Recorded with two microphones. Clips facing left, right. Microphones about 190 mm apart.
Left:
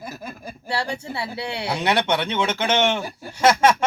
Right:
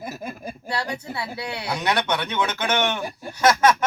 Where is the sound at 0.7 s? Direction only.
30° left (ahead or behind).